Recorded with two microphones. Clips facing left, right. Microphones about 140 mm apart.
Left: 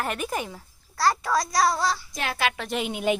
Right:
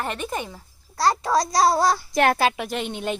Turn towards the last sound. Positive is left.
turn(degrees=5)  # may be behind; listen again after turning